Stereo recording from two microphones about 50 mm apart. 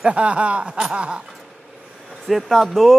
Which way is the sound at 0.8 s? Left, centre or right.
Centre.